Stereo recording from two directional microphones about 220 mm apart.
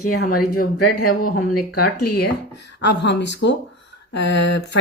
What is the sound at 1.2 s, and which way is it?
Speech, 40° left (ahead or behind).